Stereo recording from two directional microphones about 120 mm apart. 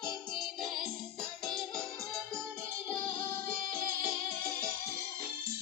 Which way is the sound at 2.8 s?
10° left (ahead or behind).